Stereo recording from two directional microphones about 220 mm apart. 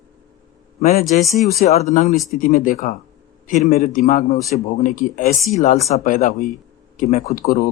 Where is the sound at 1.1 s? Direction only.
35° left (ahead or behind).